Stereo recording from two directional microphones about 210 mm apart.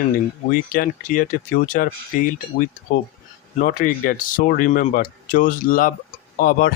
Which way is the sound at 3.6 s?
40° left (ahead or behind).